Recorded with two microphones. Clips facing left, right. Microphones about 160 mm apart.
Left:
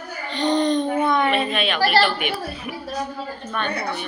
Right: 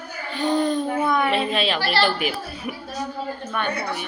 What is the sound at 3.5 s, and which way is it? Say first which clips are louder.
Speech: left 1 dB; 10° right (ahead or behind).